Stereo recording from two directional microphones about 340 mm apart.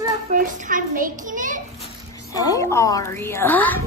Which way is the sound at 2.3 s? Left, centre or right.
Centre.